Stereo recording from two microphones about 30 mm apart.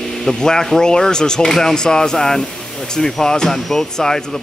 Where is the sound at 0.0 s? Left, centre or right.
Centre.